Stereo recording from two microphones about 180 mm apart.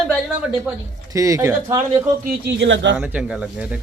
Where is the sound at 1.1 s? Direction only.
15° right (ahead or behind).